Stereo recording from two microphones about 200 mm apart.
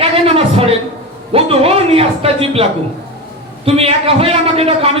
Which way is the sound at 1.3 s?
30° right (ahead or behind).